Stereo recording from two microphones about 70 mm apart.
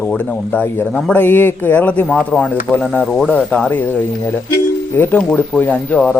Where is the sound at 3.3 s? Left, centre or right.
Centre.